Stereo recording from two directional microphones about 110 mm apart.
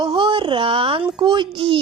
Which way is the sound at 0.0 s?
45° right (ahead or behind).